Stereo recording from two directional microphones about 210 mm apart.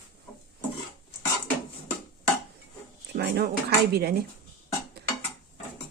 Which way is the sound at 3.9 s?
50° right (ahead or behind).